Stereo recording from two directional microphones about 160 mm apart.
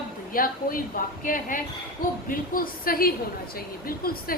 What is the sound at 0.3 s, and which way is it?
A woman's voice, 60° left (ahead or behind).